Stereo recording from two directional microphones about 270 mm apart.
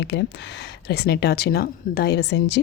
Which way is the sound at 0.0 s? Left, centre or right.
Left.